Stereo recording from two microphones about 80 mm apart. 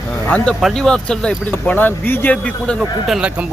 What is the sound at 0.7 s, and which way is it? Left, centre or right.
Speech, centre.